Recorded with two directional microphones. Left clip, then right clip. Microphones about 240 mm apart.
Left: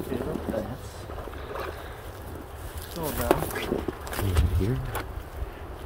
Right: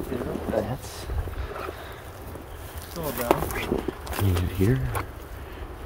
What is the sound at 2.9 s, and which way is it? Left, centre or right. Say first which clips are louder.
Walk: right 1 dB; centre.